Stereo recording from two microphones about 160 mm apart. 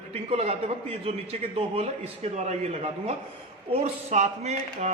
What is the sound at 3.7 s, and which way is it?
Speech, 45° right (ahead or behind).